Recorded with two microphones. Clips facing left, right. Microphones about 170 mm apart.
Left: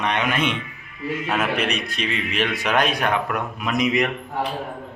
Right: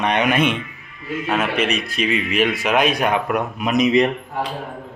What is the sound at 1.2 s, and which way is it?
A man's voice, centre (ahead or behind).